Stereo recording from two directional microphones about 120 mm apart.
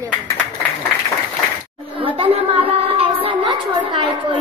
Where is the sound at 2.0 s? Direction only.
50° right (ahead or behind).